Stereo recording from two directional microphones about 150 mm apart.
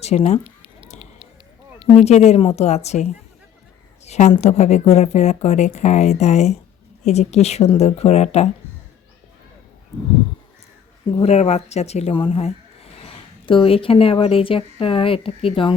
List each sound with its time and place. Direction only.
0.0 s a woman's voice: 45° left (ahead or behind)
2.0 s a woman's voice: 45° left (ahead or behind)
11.2 s speech: 45° left (ahead or behind)